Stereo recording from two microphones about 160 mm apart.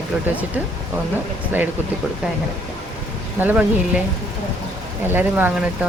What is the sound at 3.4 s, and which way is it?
Speech, 10° right (ahead or behind).